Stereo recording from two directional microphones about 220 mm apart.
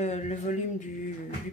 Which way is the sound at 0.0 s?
30° left (ahead or behind).